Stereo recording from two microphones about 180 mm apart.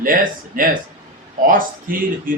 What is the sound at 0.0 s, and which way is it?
A man's voice, 50° right (ahead or behind).